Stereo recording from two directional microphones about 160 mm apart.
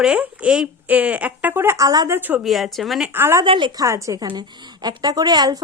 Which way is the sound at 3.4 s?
30° right (ahead or behind).